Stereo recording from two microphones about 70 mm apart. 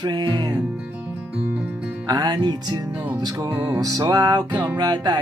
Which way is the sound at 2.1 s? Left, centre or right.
Right.